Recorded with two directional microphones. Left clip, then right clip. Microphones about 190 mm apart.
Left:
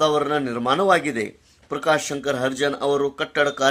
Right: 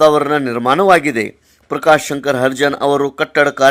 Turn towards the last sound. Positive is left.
turn(degrees=-40)  # may be behind; listen again after turning